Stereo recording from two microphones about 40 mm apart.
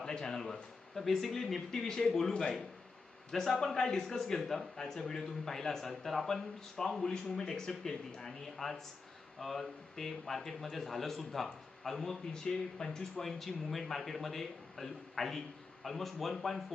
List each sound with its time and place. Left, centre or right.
0.0 s a man's voice: centre